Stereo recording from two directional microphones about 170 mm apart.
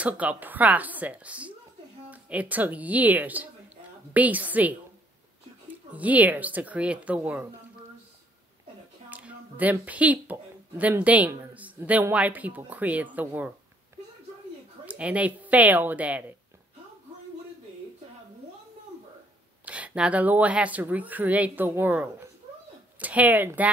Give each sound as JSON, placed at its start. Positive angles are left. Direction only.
{"t": 0.0, "sound": "speech", "side_deg": -10}
{"t": 5.9, "sound": "speech", "side_deg": -10}
{"t": 9.1, "sound": "a woman's voice", "side_deg": -10}
{"t": 14.9, "sound": "speech", "side_deg": -10}
{"t": 19.6, "sound": "speech", "side_deg": -10}